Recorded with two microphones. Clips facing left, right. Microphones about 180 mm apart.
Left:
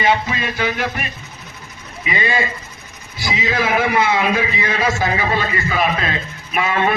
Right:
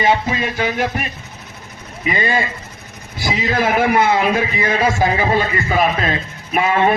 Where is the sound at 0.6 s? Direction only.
40° right (ahead or behind).